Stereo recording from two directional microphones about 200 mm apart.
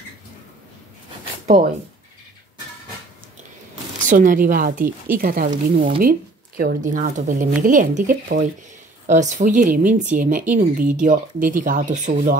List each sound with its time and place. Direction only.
4.0 s speech: 40° right (ahead or behind)